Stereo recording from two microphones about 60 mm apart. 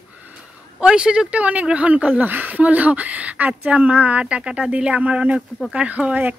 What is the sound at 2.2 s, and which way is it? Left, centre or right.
Speech, right.